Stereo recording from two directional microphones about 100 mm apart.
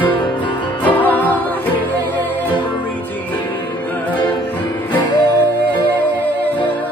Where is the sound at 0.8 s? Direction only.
15° left (ahead or behind).